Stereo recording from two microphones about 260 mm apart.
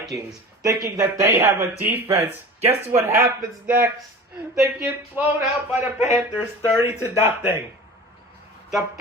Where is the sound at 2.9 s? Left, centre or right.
Centre.